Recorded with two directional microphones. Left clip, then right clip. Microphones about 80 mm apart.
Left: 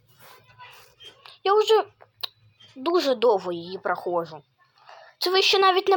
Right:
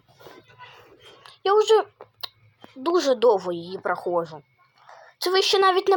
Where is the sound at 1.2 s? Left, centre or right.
Centre.